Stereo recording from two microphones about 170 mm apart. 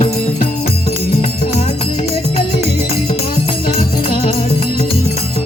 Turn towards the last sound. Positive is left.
turn(degrees=30)  # may be behind; listen again after turning